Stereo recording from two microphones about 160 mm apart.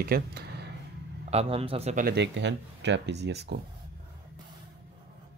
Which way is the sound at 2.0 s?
80° right.